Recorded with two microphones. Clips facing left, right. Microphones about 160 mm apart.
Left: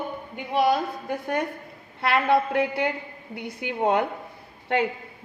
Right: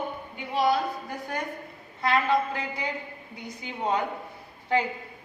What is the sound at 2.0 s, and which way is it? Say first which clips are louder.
A woman's voice: left 3 dB; 65° left (ahead or behind).